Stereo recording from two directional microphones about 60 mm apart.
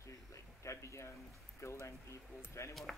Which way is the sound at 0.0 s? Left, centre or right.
Left.